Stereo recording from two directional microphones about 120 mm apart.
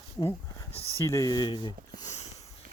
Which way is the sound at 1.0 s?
30° left (ahead or behind).